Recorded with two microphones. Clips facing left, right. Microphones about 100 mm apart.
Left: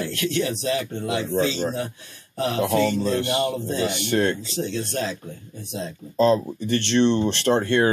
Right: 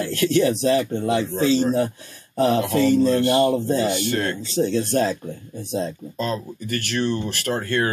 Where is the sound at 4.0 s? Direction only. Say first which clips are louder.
Left 2 dB; 20° left (ahead or behind).